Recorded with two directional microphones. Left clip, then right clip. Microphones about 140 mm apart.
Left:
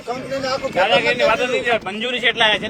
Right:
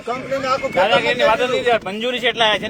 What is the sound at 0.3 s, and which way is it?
Speech, 25° right (ahead or behind).